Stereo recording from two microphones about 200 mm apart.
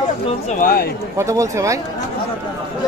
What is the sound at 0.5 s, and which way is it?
Speech, 45° left (ahead or behind).